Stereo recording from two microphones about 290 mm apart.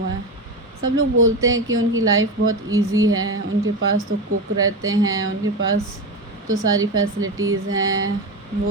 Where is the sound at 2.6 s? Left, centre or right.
Centre.